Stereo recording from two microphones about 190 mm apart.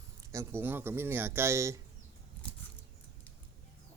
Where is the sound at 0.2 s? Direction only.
15° right (ahead or behind).